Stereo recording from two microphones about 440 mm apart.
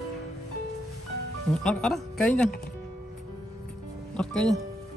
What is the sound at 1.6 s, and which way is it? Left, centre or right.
Speech, centre.